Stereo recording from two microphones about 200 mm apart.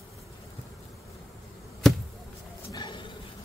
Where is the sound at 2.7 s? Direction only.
20° left (ahead or behind).